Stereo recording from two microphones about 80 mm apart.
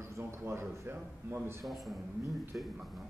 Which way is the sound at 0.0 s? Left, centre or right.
Right.